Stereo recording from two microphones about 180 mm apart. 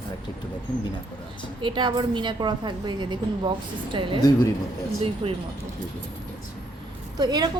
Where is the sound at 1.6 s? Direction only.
25° right (ahead or behind).